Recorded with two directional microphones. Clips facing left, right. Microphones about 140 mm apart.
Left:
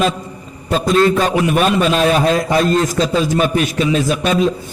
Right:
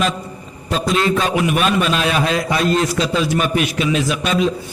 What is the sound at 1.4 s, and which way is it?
A man's voice, 35° left (ahead or behind).